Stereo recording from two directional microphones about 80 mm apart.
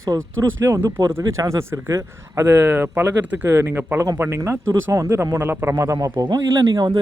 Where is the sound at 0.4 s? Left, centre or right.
Right.